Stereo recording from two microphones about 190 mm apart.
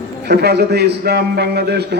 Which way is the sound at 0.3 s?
60° right (ahead or behind).